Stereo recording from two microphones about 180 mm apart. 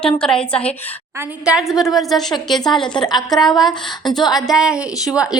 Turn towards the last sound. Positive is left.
turn(degrees=-5)  # may be behind; listen again after turning